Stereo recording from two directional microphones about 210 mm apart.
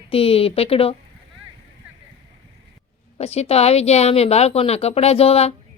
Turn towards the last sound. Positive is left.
turn(degrees=30)  # may be behind; listen again after turning